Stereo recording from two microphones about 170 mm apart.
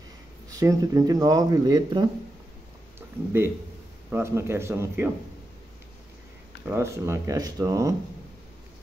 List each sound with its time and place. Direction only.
0.5 s speech: 20° right (ahead or behind)
4.1 s speech: 15° right (ahead or behind)
6.7 s speech: 15° right (ahead or behind)